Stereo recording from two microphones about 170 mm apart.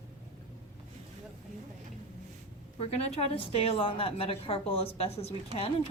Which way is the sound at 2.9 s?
40° left (ahead or behind).